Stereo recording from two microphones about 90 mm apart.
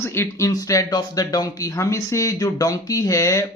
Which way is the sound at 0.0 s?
30° left (ahead or behind).